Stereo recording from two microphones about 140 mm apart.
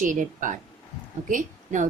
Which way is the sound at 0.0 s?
70° right (ahead or behind).